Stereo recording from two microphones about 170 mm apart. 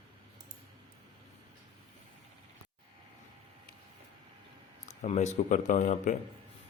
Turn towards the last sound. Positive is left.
turn(degrees=45)  # may be behind; listen again after turning